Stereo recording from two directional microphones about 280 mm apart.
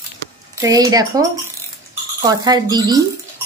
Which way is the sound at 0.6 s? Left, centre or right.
Centre.